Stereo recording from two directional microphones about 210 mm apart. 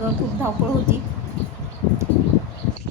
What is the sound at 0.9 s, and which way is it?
Speech, 10° right (ahead or behind).